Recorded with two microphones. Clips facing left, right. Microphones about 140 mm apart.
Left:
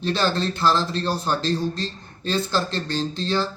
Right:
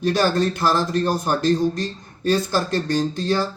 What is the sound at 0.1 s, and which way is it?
A man's voice, 15° right (ahead or behind).